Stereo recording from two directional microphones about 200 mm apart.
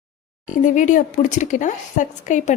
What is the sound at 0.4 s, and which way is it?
Speech, 40° left (ahead or behind).